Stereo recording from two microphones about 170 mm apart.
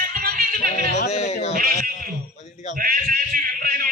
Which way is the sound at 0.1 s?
60° right (ahead or behind).